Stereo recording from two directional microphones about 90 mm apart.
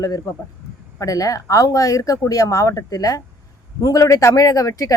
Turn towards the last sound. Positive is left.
turn(degrees=40)  # may be behind; listen again after turning